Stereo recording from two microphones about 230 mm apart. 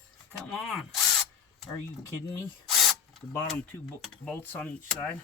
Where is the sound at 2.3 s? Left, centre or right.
Centre.